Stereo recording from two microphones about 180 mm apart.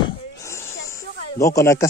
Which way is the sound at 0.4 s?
15° left (ahead or behind).